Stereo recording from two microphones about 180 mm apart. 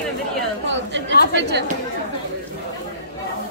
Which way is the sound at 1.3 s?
75° right (ahead or behind).